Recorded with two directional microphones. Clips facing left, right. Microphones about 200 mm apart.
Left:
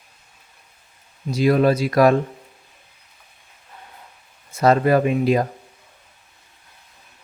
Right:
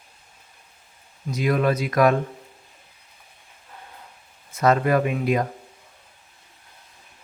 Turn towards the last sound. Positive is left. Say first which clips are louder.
# left 4 dB
turn(degrees=30)  # may be behind; listen again after turning